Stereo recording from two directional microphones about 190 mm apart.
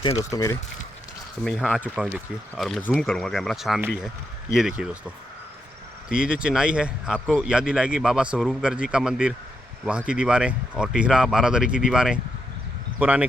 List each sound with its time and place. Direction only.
0.2 s speech: 15° left (ahead or behind)
1.5 s speech: centre (ahead or behind)
6.1 s speech: 5° right (ahead or behind)